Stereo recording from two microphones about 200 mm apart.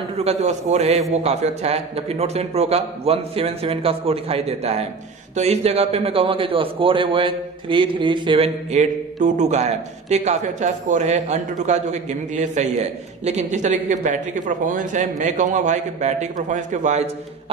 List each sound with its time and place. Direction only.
0.2 s a man's voice: 35° right (ahead or behind)